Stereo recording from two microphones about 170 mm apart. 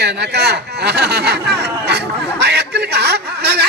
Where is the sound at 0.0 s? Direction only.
75° right (ahead or behind).